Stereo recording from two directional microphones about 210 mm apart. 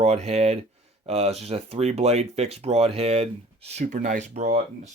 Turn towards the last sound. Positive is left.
turn(degrees=-35)  # may be behind; listen again after turning